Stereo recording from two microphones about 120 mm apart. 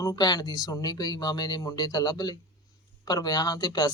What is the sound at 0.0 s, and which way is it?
Speech, 35° left (ahead or behind).